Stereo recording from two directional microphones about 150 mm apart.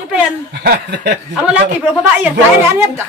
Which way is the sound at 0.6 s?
90° right.